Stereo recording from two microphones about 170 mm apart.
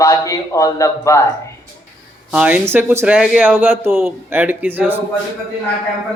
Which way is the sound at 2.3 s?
10° right (ahead or behind).